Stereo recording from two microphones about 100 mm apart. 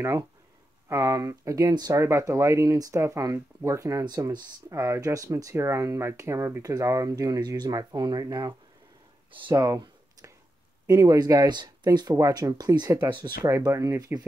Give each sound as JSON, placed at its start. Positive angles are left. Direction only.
{"t": 0.8, "sound": "speech", "side_deg": -30}
{"t": 4.0, "sound": "speech", "side_deg": -40}
{"t": 9.3, "sound": "speech", "side_deg": -55}
{"t": 9.6, "sound": "a sound", "side_deg": -40}
{"t": 10.9, "sound": "speech", "side_deg": -35}
{"t": 13.7, "sound": "speech", "side_deg": -30}